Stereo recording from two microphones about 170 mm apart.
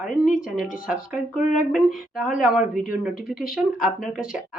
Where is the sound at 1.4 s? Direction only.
50° left (ahead or behind).